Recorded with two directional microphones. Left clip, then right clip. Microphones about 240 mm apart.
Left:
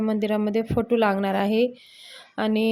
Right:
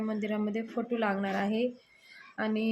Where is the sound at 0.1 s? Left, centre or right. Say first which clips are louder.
Left 11 dB; left.